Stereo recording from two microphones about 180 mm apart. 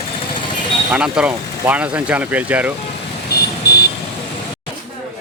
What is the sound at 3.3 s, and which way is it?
Vehicle, 60° left (ahead or behind).